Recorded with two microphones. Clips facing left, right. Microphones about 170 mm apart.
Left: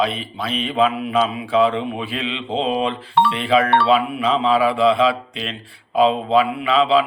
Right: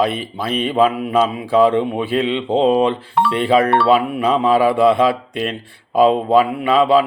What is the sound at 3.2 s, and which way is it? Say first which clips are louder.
Speech: left 1 dB; centre (ahead or behind).